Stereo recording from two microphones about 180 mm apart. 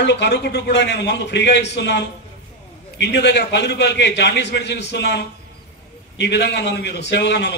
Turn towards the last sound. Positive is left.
turn(degrees=70)  # may be behind; listen again after turning